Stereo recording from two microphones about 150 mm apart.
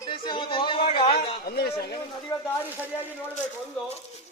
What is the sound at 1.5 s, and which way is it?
Speech, 90° left.